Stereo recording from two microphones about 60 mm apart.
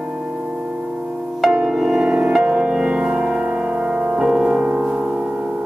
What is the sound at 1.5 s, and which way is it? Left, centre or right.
Music, centre.